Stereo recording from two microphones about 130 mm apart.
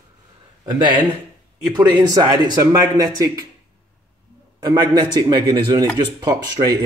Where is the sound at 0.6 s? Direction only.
30° right (ahead or behind).